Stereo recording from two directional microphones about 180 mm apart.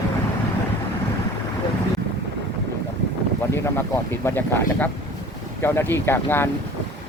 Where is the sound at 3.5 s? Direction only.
15° left (ahead or behind).